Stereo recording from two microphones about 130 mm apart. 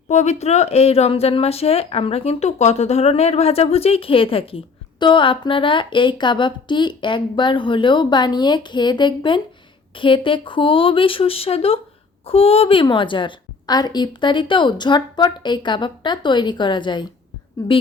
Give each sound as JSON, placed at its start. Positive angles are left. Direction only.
{"t": 0.1, "sound": "a woman's voice", "side_deg": 60}